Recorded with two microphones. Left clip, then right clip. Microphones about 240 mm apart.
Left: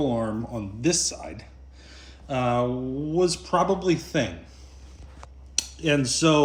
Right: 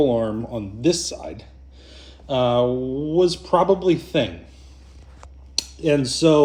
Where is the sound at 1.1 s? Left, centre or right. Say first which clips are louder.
Right 5 dB; centre.